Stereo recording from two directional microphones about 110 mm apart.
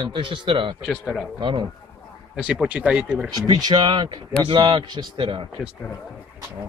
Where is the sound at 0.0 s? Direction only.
45° right (ahead or behind).